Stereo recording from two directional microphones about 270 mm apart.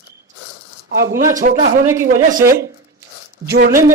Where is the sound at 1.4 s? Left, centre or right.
Right.